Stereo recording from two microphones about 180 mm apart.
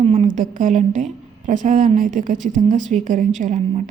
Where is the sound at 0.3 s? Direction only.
45° right (ahead or behind).